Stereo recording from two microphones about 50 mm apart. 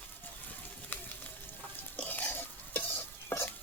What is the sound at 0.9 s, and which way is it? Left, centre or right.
Sizzle, left.